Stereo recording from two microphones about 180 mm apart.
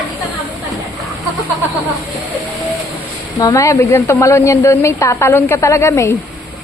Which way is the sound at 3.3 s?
20° left (ahead or behind).